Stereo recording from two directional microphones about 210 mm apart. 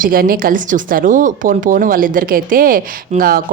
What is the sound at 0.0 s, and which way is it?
Speech, 45° right (ahead or behind).